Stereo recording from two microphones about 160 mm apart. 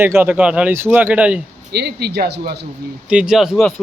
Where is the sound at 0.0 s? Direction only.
15° right (ahead or behind).